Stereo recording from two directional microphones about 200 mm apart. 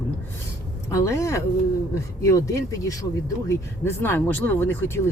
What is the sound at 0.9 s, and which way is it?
Speech, 15° left (ahead or behind).